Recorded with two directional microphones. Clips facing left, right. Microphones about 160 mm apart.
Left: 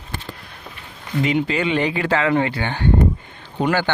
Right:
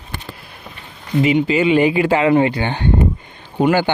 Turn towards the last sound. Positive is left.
turn(degrees=-15)  # may be behind; listen again after turning